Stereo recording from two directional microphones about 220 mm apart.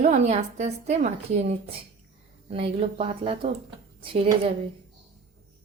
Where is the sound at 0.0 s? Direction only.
30° right (ahead or behind).